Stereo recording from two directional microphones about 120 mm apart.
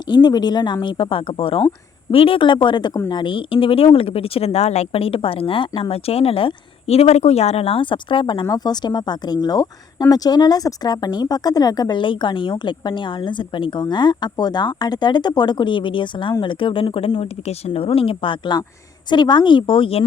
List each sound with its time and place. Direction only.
0.1 s speech: 35° left (ahead or behind)